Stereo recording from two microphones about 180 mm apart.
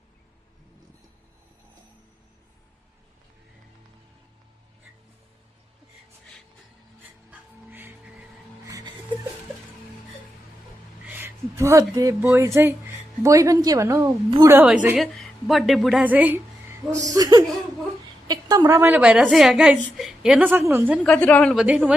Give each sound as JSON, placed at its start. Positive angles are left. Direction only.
{"t": 7.3, "sound": "music", "side_deg": -10}
{"t": 11.0, "sound": "a woman's voice", "side_deg": -10}
{"t": 21.0, "sound": "a woman's voice", "side_deg": 5}